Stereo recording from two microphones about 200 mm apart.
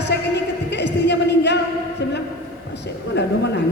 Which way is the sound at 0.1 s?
60° left (ahead or behind).